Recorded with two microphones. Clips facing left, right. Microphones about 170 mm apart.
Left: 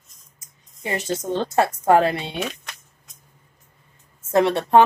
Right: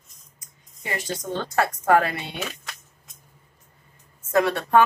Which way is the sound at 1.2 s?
25° left (ahead or behind).